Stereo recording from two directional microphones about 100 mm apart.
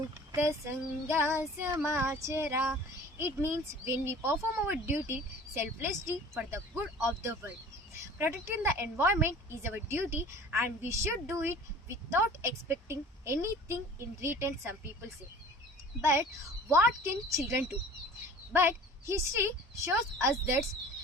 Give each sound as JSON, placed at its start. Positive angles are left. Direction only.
{"t": 0.3, "sound": "speech", "side_deg": -25}